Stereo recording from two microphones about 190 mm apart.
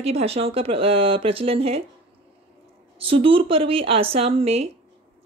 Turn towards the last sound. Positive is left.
turn(degrees=-30)  # may be behind; listen again after turning